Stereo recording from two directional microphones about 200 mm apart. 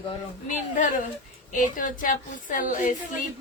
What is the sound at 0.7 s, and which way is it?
A woman's voice, 40° left (ahead or behind).